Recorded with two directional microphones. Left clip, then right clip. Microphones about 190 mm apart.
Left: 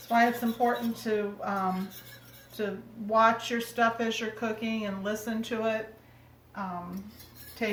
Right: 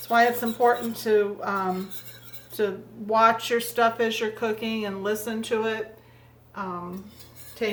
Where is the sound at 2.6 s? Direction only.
55° right (ahead or behind).